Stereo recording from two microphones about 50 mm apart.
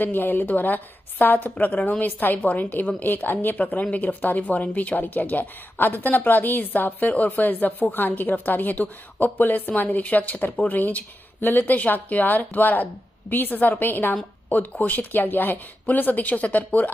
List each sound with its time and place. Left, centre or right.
0.0 s speech: left